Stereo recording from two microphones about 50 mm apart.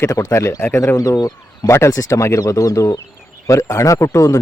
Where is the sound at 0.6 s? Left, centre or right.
Left.